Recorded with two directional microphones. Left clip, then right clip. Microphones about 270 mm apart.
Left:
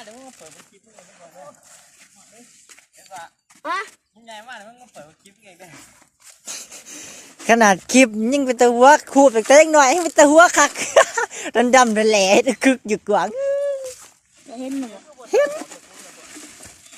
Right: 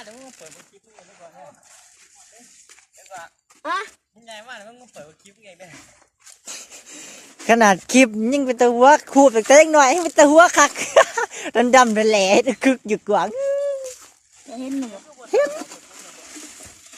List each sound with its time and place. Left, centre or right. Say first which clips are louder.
0.0 s a sound: even; centre
3.1 s speech: left 1 dB; right
3.6 s speech: even; centre
4.3 s speech: left 1 dB; right
6.4 s speech: left 2 dB; centre
14.4 s speech: even; centre
15.3 s speech: left 1 dB; centre